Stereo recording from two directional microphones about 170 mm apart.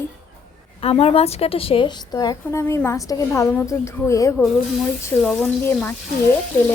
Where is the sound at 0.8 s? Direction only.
35° left (ahead or behind); by 4.4 s 15° left (ahead or behind).